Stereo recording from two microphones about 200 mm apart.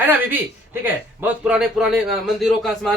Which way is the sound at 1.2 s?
5° right (ahead or behind).